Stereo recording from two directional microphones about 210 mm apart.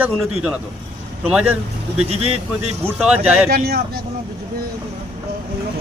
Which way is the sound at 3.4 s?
45° right (ahead or behind).